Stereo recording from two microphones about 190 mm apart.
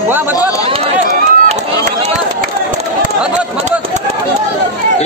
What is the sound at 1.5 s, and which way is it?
Run, 40° right (ahead or behind).